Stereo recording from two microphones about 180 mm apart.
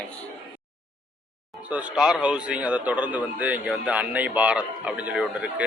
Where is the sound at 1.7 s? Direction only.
5° right (ahead or behind).